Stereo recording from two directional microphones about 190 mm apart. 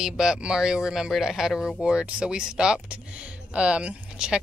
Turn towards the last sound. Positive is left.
turn(degrees=-5)  # may be behind; listen again after turning